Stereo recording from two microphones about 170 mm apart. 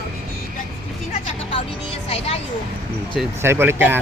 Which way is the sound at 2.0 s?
35° left (ahead or behind).